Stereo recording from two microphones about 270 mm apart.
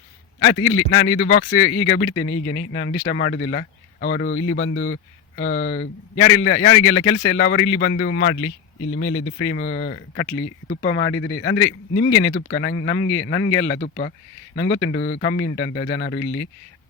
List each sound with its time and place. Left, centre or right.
0.3 s speech: left
4.7 s a man's voice: left
5.7 s speech: left
13.7 s speech: left
14.5 s speech: left